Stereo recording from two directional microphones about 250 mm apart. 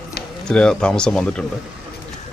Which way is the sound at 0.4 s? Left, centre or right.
Centre.